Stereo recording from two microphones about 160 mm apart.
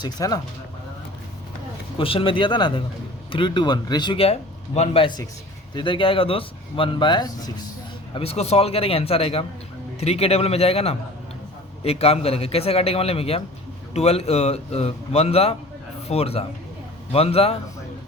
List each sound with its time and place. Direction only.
0.0 s speech: 25° left (ahead or behind)
2.0 s a man's voice: 35° left (ahead or behind)
8.1 s a man's voice: 40° left (ahead or behind)